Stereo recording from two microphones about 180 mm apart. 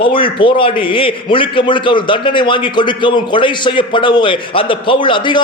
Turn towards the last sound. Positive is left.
turn(degrees=25)  # may be behind; listen again after turning